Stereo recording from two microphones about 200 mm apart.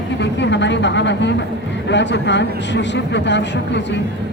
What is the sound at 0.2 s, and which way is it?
Speech, 60° left (ahead or behind).